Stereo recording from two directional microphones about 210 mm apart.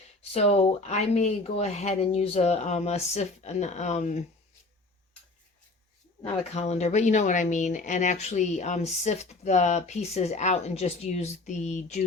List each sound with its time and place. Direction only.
0.2 s speech: 30° left (ahead or behind)
6.5 s speech: 30° left (ahead or behind)